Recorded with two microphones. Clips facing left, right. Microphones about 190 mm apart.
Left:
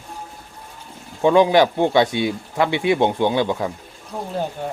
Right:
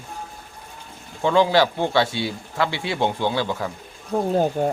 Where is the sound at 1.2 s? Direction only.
20° left (ahead or behind).